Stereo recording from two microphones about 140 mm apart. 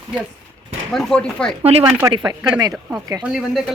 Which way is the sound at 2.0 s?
25° right (ahead or behind).